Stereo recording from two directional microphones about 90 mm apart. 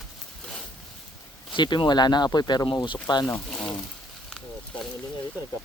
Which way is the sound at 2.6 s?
65° left (ahead or behind).